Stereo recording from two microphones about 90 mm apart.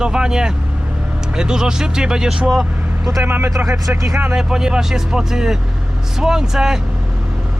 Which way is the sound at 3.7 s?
35° right (ahead or behind).